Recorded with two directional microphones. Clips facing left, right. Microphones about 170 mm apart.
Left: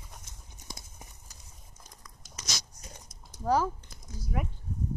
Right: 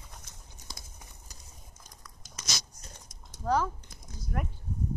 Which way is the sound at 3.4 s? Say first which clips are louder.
Left 1 dB; 10° left (ahead or behind).